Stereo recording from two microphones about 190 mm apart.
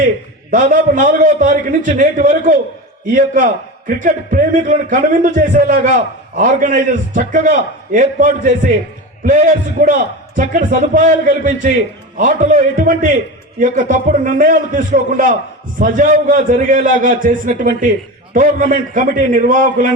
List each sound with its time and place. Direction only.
0.5 s a man's voice: 45° right (ahead or behind)